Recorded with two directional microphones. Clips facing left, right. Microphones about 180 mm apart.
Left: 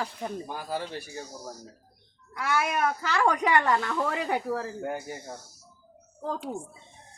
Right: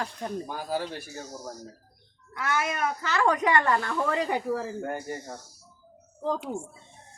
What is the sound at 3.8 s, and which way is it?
Speech, 5° left (ahead or behind).